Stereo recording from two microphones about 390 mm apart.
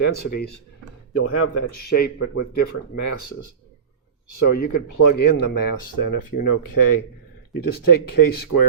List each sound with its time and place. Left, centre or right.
1.2 s a man's voice: left
4.4 s speech: left